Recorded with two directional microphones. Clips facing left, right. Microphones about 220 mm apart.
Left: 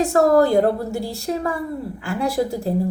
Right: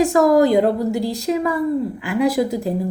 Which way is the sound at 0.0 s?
15° right (ahead or behind).